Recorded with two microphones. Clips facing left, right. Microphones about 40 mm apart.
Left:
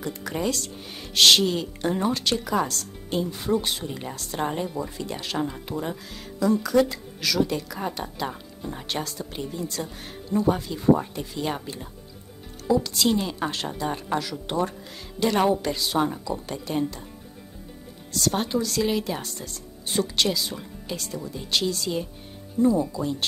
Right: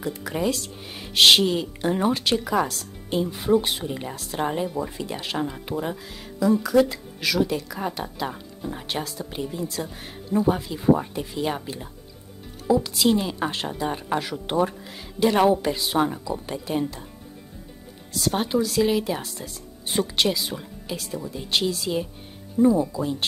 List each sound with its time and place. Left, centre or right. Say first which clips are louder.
0.0 s a woman's voice: right 2 dB; centre
18.1 s speech: right 2 dB; centre
19.9 s speech: right 1 dB; centre